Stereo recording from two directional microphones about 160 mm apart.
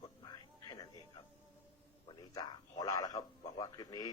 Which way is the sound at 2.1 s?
25° left (ahead or behind).